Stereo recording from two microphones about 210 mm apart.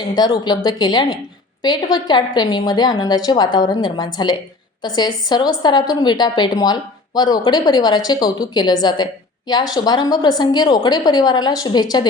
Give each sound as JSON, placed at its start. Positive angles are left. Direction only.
{"t": 0.2, "sound": "a woman's voice", "side_deg": 20}